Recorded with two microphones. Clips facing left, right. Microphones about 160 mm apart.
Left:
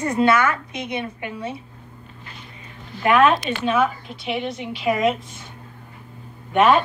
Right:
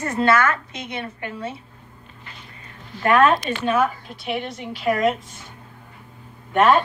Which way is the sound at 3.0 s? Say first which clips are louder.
Even; 10° left (ahead or behind).